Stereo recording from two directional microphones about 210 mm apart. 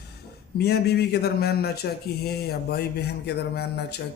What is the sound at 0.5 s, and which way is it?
A man's voice, 50° left (ahead or behind).